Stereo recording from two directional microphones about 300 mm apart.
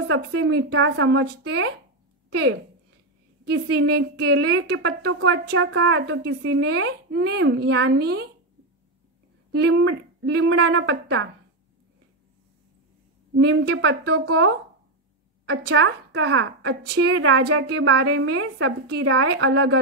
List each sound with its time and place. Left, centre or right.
0.1 s a woman's voice: right
2.2 s a sound: right
3.4 s a woman's voice: right
9.5 s a woman's voice: right
13.4 s a woman's voice: right